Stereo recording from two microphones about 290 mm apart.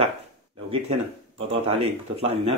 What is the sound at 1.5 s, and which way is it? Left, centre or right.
Speech, centre.